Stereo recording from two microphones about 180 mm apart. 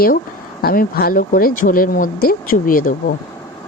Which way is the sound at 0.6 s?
55° left (ahead or behind).